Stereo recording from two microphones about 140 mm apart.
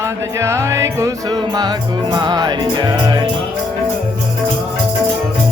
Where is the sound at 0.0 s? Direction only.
20° right (ahead or behind).